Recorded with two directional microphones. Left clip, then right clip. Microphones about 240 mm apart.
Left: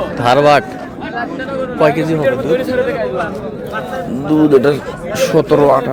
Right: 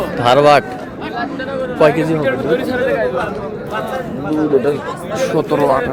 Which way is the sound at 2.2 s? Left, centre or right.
Left.